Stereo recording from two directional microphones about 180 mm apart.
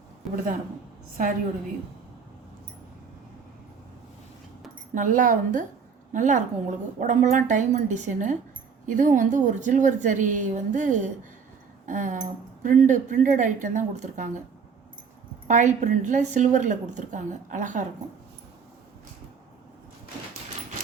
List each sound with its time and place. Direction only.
4.9 s a woman's voice: 45° right (ahead or behind)
15.4 s a woman's voice: 45° right (ahead or behind)